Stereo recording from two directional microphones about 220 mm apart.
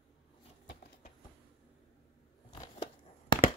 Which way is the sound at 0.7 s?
40° left (ahead or behind).